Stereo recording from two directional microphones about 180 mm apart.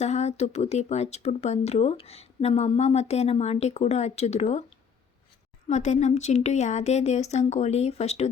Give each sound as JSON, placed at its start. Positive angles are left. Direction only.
{"t": 0.0, "sound": "speech", "side_deg": 40}
{"t": 5.6, "sound": "speech", "side_deg": 40}